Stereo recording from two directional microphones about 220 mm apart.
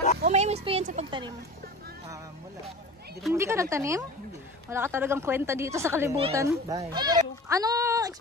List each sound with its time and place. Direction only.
0.2 s speech: 30° right (ahead or behind)
3.3 s speech: 10° right (ahead or behind)